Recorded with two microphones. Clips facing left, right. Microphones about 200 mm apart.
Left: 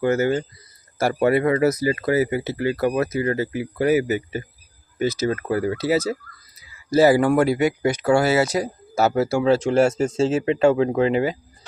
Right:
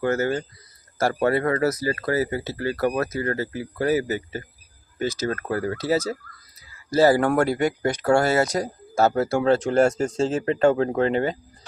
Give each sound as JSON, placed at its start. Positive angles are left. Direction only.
{"t": 0.0, "sound": "speech", "side_deg": 15}